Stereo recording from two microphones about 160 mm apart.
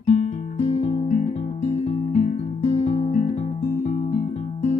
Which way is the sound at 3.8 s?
45° left (ahead or behind).